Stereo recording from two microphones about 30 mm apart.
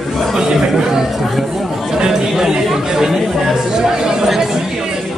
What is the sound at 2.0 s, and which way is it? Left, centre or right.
Chatter, centre.